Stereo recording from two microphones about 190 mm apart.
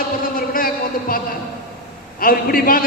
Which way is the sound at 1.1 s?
50° left (ahead or behind).